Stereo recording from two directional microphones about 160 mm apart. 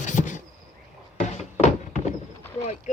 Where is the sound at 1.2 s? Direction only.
45° left (ahead or behind).